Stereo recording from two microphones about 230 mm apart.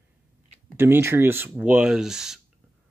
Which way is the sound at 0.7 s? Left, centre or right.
Centre.